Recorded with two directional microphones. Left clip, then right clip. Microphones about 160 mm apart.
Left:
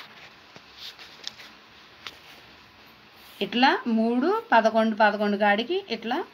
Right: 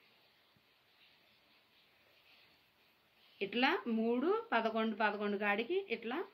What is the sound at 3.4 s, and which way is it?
Speech, 55° left (ahead or behind).